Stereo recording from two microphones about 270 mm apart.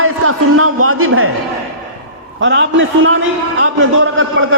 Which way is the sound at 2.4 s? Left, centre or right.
Right.